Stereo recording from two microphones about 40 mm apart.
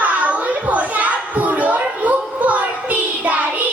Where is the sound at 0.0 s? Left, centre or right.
Right.